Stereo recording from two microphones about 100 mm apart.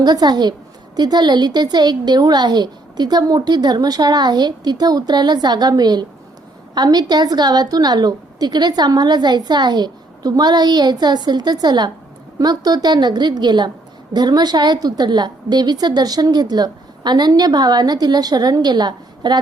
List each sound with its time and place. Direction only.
0.0 s a woman's voice: 45° right (ahead or behind)